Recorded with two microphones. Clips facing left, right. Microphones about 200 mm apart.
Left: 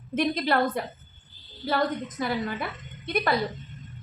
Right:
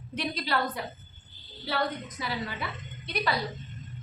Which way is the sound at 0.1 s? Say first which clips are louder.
Left 7 dB; 50° left (ahead or behind).